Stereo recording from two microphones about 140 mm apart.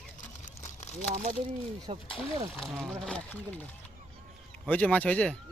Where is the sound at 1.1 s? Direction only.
70° right (ahead or behind).